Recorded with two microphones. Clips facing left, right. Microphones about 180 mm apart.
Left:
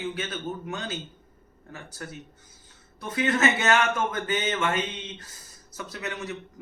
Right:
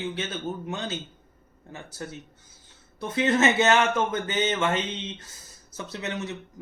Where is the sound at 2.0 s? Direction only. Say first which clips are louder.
Right 3 dB; 25° right (ahead or behind).